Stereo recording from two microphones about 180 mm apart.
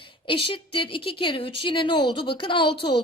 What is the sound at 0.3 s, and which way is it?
A woman's voice, 30° left (ahead or behind).